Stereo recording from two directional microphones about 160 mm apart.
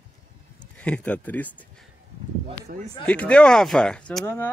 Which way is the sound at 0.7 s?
10° left (ahead or behind).